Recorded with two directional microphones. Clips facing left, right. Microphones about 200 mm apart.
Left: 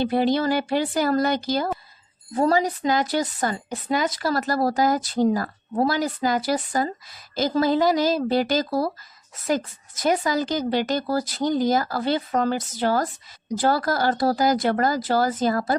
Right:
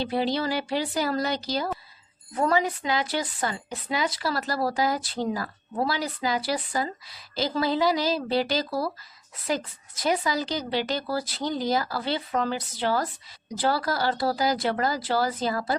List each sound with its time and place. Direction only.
0.0 s speech: 50° left (ahead or behind)
2.3 s speech: 35° left (ahead or behind)
10.0 s speech: 50° left (ahead or behind)